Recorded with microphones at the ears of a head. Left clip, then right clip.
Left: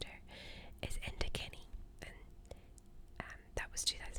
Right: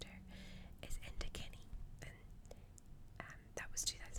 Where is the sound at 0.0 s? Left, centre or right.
Left.